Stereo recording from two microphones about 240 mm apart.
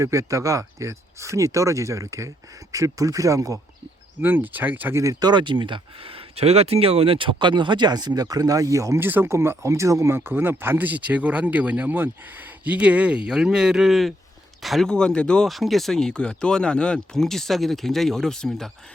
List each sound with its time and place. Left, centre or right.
0.0 s speech: centre